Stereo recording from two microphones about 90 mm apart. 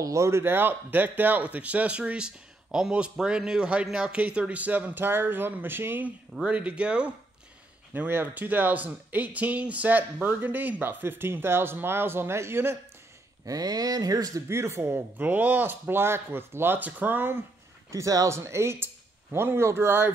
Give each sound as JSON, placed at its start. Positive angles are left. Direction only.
{"t": 0.0, "sound": "speech", "side_deg": -35}
{"t": 6.3, "sound": "speech", "side_deg": -10}
{"t": 7.9, "sound": "speech", "side_deg": -20}
{"t": 13.5, "sound": "speech", "side_deg": -45}
{"t": 17.9, "sound": "speech", "side_deg": -40}